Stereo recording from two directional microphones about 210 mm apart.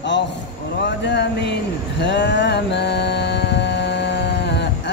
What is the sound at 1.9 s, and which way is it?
Mantra, 60° left (ahead or behind).